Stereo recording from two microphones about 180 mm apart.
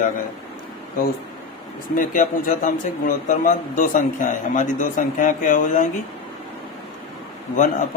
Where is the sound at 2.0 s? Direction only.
50° left (ahead or behind).